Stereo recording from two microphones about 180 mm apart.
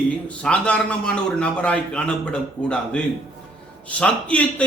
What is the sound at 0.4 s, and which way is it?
A man's voice, 5° left (ahead or behind).